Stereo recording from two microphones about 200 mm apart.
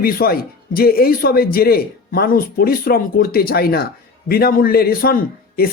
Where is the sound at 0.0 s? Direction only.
50° left (ahead or behind).